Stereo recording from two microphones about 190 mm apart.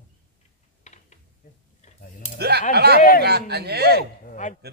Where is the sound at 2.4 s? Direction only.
60° right (ahead or behind).